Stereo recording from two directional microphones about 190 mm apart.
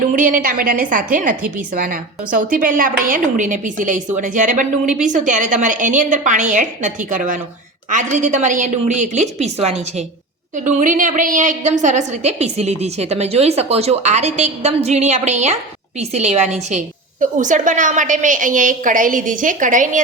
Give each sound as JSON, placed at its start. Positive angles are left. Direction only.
{"t": 0.1, "sound": "a woman's voice", "side_deg": -45}